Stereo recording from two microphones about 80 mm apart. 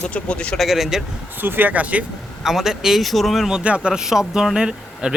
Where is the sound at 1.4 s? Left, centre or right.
Right.